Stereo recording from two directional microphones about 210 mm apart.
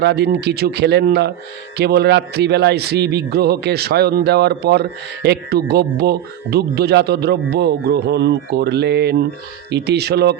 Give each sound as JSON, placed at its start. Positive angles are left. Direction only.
{"t": 0.0, "sound": "a man's voice", "side_deg": -50}